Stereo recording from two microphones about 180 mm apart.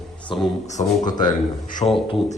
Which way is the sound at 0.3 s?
30° left (ahead or behind).